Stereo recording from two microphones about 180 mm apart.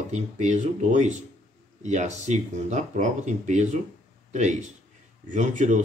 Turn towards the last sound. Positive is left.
turn(degrees=-45)  # may be behind; listen again after turning